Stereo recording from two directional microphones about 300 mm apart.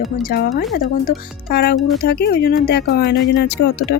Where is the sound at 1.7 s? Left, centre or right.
Centre.